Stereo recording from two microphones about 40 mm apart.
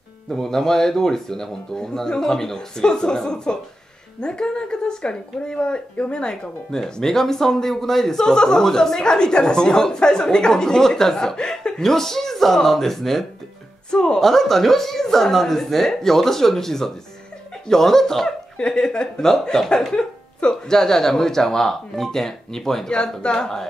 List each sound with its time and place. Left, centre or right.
0.3 s speech: centre
13.8 s speech: centre
14.2 s speech: centre